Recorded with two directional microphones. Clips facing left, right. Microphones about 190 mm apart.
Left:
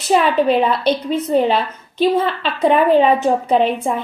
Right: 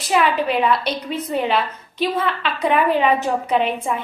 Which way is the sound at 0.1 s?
30° left (ahead or behind).